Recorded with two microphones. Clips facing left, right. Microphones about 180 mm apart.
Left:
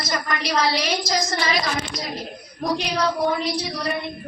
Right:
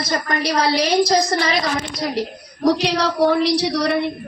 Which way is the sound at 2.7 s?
80° right.